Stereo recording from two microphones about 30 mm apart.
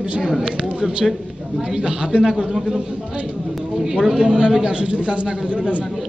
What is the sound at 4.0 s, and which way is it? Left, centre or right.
Speech, centre.